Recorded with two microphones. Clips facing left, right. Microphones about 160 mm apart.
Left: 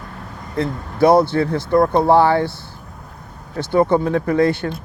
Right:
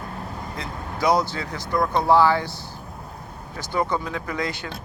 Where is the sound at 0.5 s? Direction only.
55° left (ahead or behind).